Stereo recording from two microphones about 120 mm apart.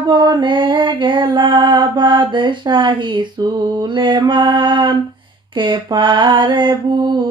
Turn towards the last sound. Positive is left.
turn(degrees=-40)  # may be behind; listen again after turning